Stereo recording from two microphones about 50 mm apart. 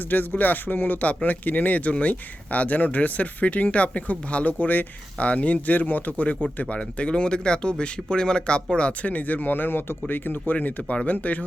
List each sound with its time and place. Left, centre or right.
0.1 s speech: left
4.6 s speech: left
5.2 s speech: left
6.7 s speech: centre